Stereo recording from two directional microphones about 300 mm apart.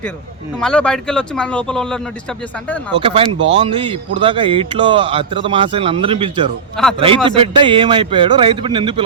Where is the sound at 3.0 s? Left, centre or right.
Centre.